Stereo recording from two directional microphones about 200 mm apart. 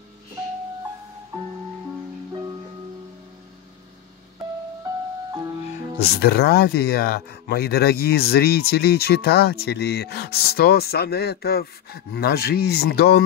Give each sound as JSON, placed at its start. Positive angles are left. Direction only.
{"t": 5.9, "sound": "speech", "side_deg": 55}